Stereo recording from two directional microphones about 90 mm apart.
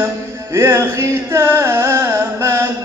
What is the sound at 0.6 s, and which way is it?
Carnatic music, 35° right (ahead or behind).